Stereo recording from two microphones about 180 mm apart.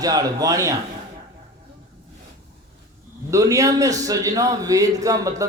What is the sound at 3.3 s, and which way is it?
A man's voice, 20° right (ahead or behind).